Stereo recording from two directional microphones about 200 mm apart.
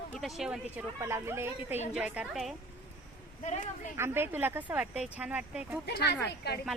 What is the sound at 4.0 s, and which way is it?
A woman's voice, 10° right (ahead or behind).